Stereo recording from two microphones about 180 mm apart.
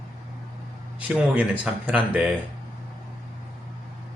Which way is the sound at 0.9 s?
5° right (ahead or behind).